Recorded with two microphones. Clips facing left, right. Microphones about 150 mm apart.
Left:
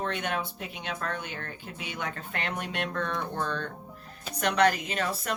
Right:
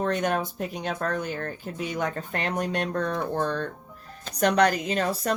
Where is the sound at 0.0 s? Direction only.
40° right (ahead or behind).